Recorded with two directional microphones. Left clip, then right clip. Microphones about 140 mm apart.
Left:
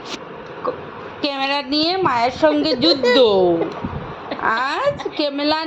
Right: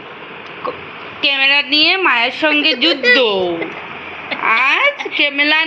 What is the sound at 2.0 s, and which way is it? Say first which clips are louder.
Speech: right 3 dB; 20° right (ahead or behind).